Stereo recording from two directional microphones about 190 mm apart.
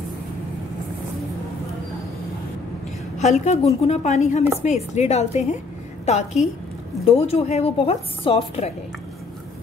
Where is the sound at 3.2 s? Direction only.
35° left (ahead or behind).